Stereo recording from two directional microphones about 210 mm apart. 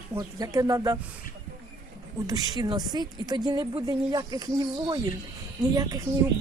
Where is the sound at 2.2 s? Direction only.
20° right (ahead or behind).